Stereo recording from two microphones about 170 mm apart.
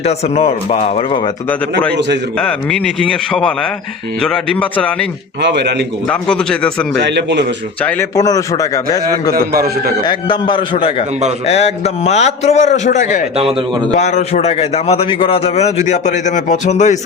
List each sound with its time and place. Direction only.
0.0 s a man's voice: 40° left (ahead or behind)
2.4 s a man's voice: 5° left (ahead or behind)
5.4 s a man's voice: 85° right
6.1 s a man's voice: 5° left (ahead or behind)
7.0 s a man's voice: 90° right
7.8 s speech: 10° left (ahead or behind)
8.1 s a man's voice: 20° left (ahead or behind)
9.3 s a man's voice: 65° right (ahead or behind)
10.0 s a man's voice: 25° left (ahead or behind); by 17.0 s 45° left (ahead or behind)